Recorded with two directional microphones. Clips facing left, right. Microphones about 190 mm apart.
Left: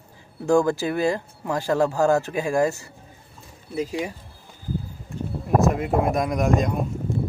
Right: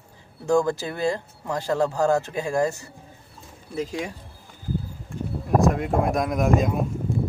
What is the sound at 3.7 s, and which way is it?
Speech, 5° left (ahead or behind).